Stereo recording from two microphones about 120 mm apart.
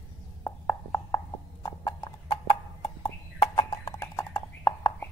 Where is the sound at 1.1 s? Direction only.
30° left (ahead or behind).